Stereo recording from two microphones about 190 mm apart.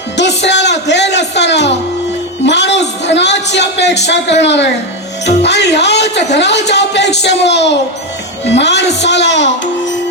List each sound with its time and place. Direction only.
0.2 s music: 65° left (ahead or behind)
3.0 s a man's voice: 65° left (ahead or behind)